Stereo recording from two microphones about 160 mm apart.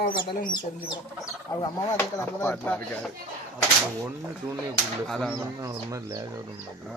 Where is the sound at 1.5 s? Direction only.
20° left (ahead or behind).